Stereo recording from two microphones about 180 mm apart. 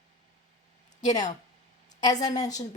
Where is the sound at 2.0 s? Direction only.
20° left (ahead or behind).